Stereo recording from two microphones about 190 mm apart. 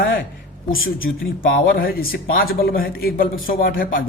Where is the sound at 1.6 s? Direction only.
50° left (ahead or behind).